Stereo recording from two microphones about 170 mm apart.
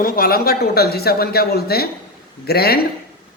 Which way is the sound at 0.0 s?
60° left (ahead or behind).